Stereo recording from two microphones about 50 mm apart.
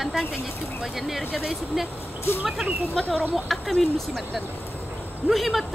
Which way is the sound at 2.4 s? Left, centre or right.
Centre.